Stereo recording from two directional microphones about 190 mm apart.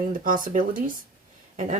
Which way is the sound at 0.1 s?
45° right (ahead or behind).